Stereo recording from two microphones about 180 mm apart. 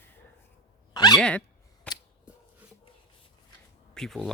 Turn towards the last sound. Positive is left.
turn(degrees=0)  # may be behind; listen again after turning